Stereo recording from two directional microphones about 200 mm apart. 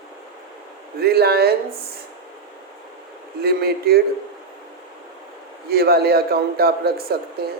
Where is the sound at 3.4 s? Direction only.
50° right (ahead or behind).